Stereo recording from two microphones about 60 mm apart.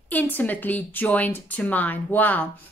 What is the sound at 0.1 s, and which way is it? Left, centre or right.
Speech, left.